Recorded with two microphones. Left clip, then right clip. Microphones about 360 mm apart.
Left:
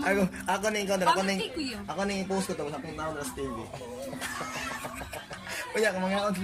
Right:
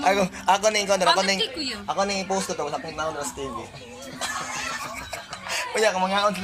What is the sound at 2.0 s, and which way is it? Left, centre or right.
Speech, right.